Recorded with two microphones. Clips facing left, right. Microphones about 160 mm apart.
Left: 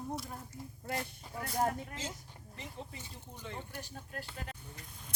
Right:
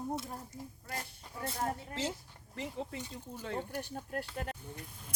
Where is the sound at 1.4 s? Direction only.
30° right (ahead or behind).